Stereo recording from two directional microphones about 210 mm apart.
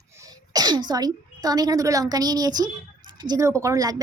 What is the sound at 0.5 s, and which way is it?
Speech, 20° right (ahead or behind).